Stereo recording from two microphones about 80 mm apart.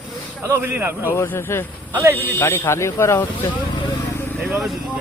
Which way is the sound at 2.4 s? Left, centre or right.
Left.